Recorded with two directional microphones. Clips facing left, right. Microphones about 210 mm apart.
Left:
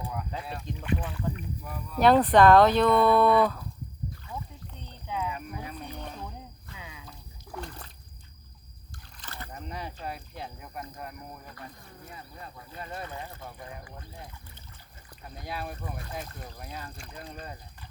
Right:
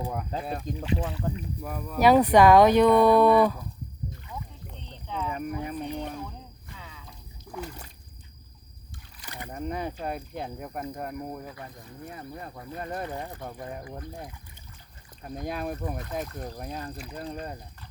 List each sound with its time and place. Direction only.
0.1 s speech: 40° right (ahead or behind)
0.8 s speech: 25° right (ahead or behind)
1.6 s speech: 45° right (ahead or behind)
2.0 s speech: 10° right (ahead or behind)
5.0 s a sound: 10° left (ahead or behind)
5.3 s a sound: 50° right (ahead or behind)
6.7 s a sound: 10° left (ahead or behind)
7.5 s splash: 10° right (ahead or behind)
9.2 s rowboat: 15° right (ahead or behind)
9.5 s speech: 50° right (ahead or behind)
15.4 s speech: 45° right (ahead or behind)